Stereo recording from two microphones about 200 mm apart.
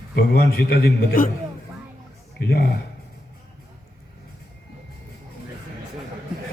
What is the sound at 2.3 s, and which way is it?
Speech, 50° left (ahead or behind).